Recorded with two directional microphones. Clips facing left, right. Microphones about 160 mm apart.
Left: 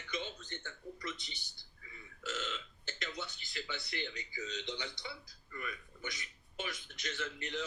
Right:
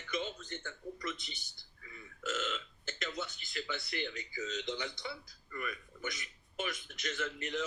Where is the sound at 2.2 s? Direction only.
50° right (ahead or behind).